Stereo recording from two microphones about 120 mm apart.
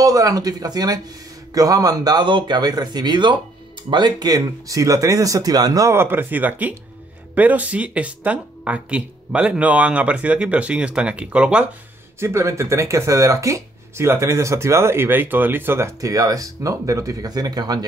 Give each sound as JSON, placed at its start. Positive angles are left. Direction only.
{"t": 0.0, "sound": "speech", "side_deg": -30}
{"t": 12.2, "sound": "speech", "side_deg": -20}